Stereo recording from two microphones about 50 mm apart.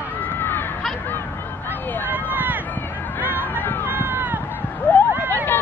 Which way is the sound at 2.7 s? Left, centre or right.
Left.